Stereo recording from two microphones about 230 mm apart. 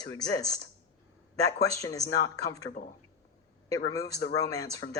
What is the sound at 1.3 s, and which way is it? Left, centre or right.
Speech, centre.